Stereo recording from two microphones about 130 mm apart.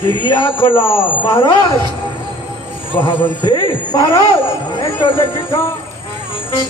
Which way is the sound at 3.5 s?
35° left (ahead or behind).